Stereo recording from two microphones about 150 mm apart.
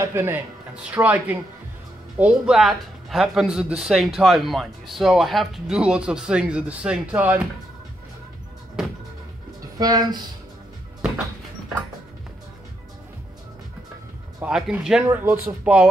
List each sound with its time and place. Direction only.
0.0 s speech: 15° right (ahead or behind)
9.8 s speech: 25° right (ahead or behind)
14.4 s speech: 5° right (ahead or behind)